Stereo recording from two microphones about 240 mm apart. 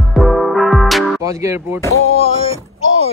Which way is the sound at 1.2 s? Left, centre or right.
Centre.